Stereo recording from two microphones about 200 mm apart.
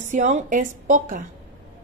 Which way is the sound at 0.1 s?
35° right (ahead or behind).